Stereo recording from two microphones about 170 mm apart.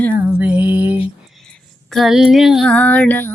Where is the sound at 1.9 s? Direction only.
Centre (ahead or behind).